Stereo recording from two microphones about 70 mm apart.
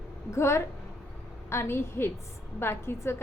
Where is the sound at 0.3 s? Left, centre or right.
Left.